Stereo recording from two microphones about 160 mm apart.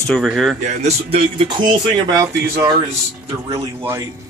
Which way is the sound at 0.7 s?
40° right (ahead or behind).